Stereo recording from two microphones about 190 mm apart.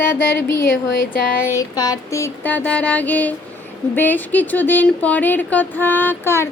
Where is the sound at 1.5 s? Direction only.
20° left (ahead or behind).